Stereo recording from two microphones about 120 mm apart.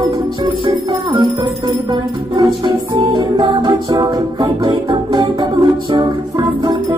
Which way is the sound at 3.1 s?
35° right (ahead or behind).